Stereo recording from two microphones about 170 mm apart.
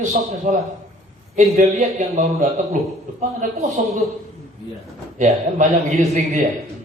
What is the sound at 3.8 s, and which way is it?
Speech, 45° right (ahead or behind).